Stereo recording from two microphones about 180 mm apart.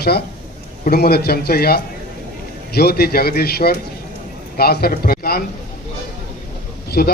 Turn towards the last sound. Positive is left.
turn(degrees=60)  # may be behind; listen again after turning